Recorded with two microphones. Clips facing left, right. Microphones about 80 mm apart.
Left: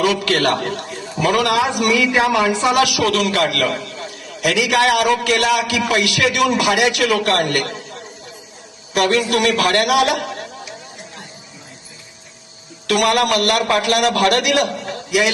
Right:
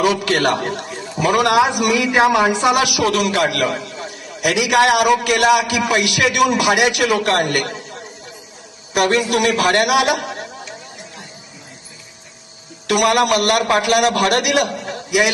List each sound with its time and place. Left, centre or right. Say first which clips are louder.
0.3 s a man's voice: even; right
0.7 s a sound: even; right
1.0 s a man's voice: right 1 dB; centre; by 7.4 s right
9.0 s a man's voice: even; right
12.9 s a man's voice: right 1 dB; centre